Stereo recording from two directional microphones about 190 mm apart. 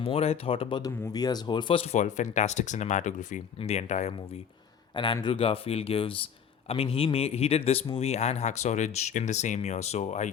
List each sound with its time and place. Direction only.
0.0 s speech: 30° left (ahead or behind)
4.9 s speech: 25° left (ahead or behind)